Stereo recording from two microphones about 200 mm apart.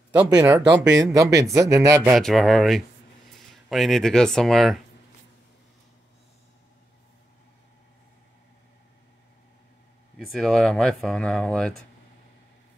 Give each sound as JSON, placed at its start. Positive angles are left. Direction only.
{"t": 0.3, "sound": "speech", "side_deg": -20}
{"t": 2.1, "sound": "speech", "side_deg": 0}
{"t": 10.1, "sound": "speech", "side_deg": 0}